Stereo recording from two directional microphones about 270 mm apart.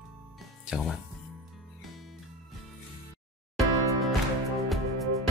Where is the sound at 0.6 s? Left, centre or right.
Centre.